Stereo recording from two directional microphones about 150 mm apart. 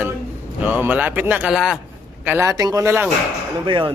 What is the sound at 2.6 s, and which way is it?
Speech, 25° right (ahead or behind).